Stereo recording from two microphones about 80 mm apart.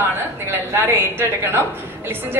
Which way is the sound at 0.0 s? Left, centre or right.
Right.